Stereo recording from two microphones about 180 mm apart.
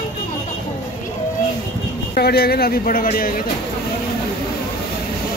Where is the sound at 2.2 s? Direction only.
60° left (ahead or behind).